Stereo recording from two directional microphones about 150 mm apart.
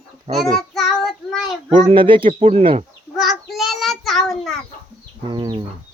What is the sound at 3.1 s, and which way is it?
Child singing, 5° right (ahead or behind).